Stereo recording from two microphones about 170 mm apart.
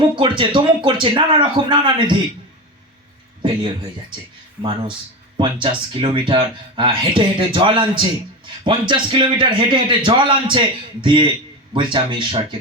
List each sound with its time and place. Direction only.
0.0 s speech: 30° right (ahead or behind)
5.4 s speech: 30° right (ahead or behind)